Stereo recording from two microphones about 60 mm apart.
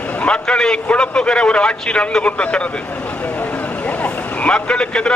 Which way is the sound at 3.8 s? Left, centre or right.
Left.